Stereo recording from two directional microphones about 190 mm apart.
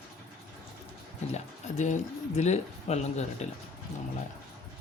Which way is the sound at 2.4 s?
35° left (ahead or behind).